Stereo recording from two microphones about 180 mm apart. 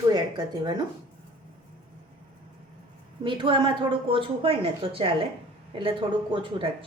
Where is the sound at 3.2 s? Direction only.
25° right (ahead or behind).